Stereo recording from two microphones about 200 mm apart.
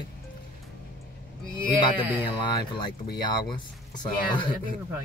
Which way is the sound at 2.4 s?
20° left (ahead or behind).